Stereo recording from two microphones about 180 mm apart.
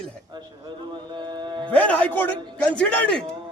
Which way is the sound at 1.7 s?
10° left (ahead or behind).